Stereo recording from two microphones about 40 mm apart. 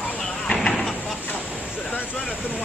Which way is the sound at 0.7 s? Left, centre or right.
Centre.